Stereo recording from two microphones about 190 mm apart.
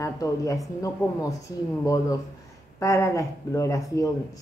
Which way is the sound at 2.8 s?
15° left (ahead or behind).